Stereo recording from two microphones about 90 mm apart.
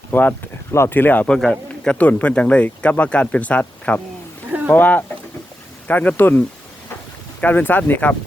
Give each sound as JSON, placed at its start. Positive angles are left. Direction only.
{"t": 0.1, "sound": "speech", "side_deg": 20}
{"t": 1.4, "sound": "speech", "side_deg": 10}
{"t": 7.4, "sound": "speech", "side_deg": 20}